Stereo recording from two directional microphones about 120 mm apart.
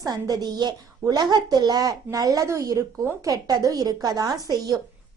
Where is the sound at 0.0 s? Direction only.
30° right (ahead or behind).